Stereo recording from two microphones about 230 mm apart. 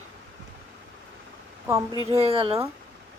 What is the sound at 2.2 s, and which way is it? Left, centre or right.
Speech, right.